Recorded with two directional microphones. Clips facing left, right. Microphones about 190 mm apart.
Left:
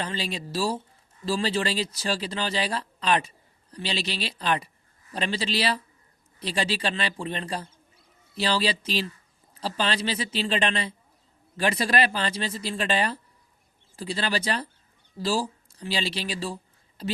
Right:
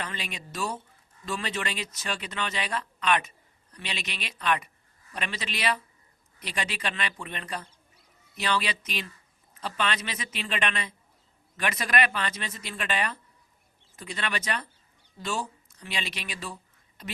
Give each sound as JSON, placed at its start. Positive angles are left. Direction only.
{"t": 0.0, "sound": "speech", "side_deg": 30}